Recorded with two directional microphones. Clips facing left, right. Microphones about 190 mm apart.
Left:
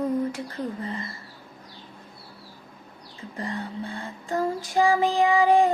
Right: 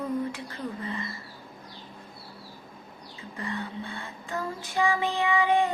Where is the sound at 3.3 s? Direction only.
40° left (ahead or behind).